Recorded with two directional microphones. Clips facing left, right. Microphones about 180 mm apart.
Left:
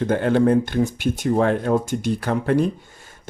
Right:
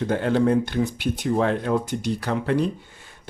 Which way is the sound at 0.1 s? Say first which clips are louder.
Left 3 dB; 55° left (ahead or behind).